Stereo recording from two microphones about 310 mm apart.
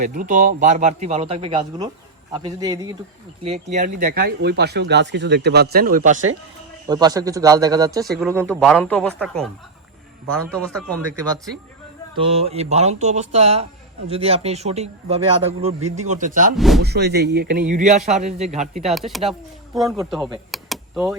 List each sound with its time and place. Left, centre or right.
0.0 s a man's voice: right
6.8 s a man's voice: centre
10.5 s a man's voice: centre
12.1 s a man's voice: centre
16.6 s a man's voice: centre
16.8 s a man's voice: right
18.9 s a man's voice: centre
20.5 s a sound: centre